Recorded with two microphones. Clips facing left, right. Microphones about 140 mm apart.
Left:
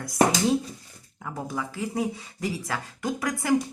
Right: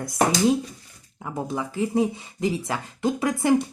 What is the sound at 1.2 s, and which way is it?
Speech, 20° right (ahead or behind).